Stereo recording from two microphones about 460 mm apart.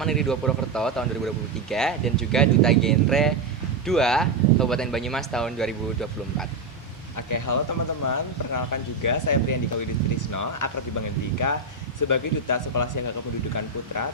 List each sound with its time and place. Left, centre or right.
0.0 s speech: centre
7.2 s speech: left